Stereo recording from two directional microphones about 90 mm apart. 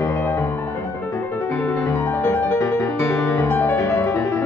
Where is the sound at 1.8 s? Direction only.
35° left (ahead or behind).